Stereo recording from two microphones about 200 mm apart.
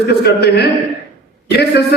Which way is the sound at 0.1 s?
55° left (ahead or behind).